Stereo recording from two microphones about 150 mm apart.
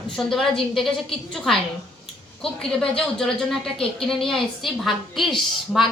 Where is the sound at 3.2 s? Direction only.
5° left (ahead or behind).